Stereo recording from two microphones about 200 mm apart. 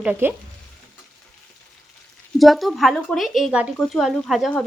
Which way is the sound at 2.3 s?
Centre (ahead or behind).